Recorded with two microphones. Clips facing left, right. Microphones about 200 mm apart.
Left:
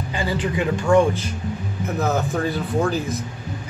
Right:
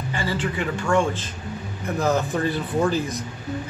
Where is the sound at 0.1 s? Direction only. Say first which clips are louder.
Left 3 dB; 15° left (ahead or behind).